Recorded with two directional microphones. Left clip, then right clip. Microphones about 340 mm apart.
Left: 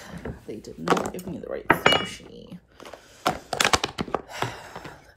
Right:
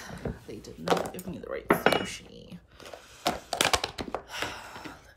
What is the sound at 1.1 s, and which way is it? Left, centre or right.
Speech, centre.